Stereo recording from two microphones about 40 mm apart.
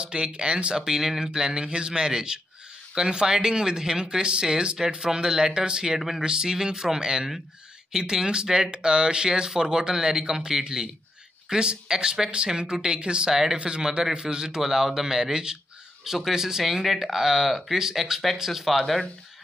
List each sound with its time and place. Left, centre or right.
0.0 s speech: right
0.8 s a man's voice: centre
5.9 s speech: centre
6.2 s a man's voice: centre
16.6 s speech: centre